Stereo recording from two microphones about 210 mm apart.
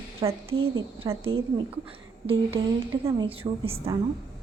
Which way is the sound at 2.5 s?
15° right (ahead or behind).